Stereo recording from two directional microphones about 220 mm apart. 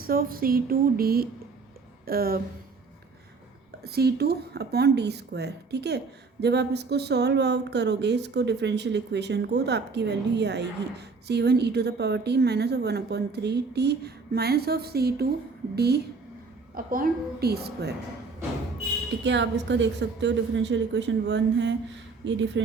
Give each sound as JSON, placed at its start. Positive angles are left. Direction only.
{"t": 0.0, "sound": "speech", "side_deg": -40}
{"t": 3.8, "sound": "speech", "side_deg": -45}
{"t": 19.2, "sound": "a woman's voice", "side_deg": -55}